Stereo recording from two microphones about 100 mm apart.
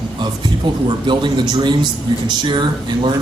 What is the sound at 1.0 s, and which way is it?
Speech, 50° right (ahead or behind).